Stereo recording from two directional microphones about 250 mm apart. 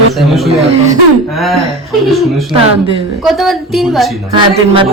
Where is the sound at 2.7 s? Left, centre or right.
Right.